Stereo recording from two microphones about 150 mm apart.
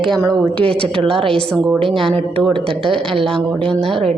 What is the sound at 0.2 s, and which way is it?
Speech, 25° right (ahead or behind).